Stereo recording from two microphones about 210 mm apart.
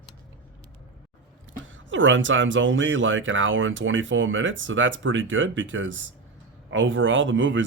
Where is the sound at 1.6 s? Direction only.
65° right (ahead or behind).